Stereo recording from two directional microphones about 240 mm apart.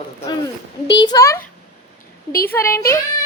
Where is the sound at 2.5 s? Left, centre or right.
Centre.